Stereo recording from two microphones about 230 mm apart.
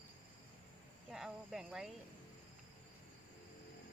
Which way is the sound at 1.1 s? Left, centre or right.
Centre.